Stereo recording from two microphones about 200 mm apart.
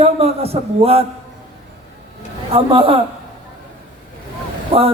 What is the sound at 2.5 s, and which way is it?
Speech, 25° right (ahead or behind).